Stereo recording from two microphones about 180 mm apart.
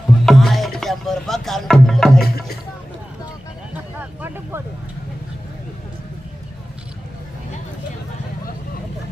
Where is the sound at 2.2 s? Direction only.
60° left (ahead or behind).